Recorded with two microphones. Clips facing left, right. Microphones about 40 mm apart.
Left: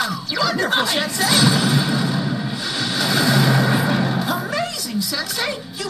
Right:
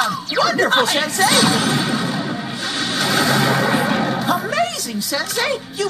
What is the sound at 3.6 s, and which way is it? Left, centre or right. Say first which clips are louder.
Vehicle: right 1 dB; centre.